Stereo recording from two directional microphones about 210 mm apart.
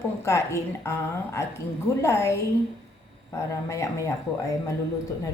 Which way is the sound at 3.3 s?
15° left (ahead or behind).